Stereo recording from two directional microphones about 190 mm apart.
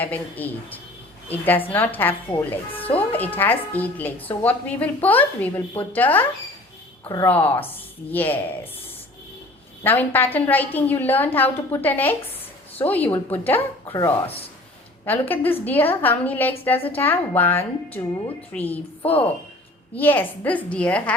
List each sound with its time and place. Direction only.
0.0 s a woman's voice: 10° left (ahead or behind)
7.3 s a woman's voice: 10° left (ahead or behind)
9.8 s a woman's voice: 10° left (ahead or behind)
15.3 s a woman's voice: 10° left (ahead or behind)